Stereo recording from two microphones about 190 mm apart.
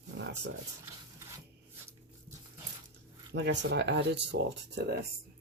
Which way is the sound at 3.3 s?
65° right (ahead or behind).